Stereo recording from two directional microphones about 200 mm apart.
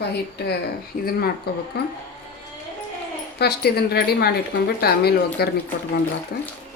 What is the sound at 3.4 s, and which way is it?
Speech, 55° left (ahead or behind).